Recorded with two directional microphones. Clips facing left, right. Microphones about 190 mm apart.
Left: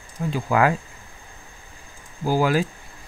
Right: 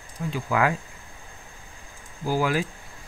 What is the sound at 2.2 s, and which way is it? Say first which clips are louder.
Speech: left 4 dB; 35° left (ahead or behind).